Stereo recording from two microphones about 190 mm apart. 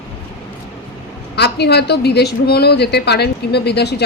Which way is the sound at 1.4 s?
60° left (ahead or behind).